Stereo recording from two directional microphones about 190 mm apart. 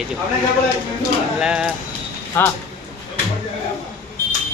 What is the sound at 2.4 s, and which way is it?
Speech, 10° left (ahead or behind).